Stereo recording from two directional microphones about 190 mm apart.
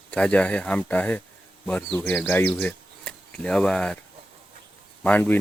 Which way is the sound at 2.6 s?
5° left (ahead or behind).